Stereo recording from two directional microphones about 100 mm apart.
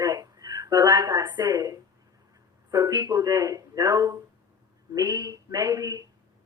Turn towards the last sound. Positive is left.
turn(degrees=-35)  # may be behind; listen again after turning